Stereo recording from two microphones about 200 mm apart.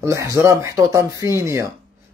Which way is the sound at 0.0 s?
15° right (ahead or behind).